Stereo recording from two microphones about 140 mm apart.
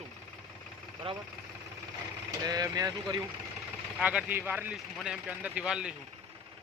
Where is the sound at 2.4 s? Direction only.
30° right (ahead or behind).